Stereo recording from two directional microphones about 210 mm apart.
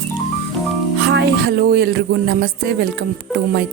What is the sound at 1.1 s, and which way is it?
A woman's voice, 50° right (ahead or behind).